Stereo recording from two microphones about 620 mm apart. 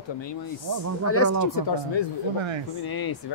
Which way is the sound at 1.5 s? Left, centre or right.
Left.